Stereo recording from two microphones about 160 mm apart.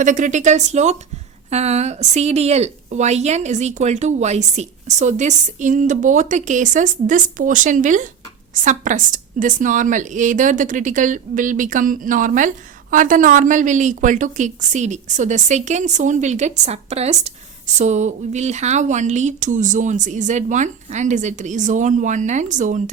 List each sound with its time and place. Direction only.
0.0 s a woman's voice: 50° right (ahead or behind)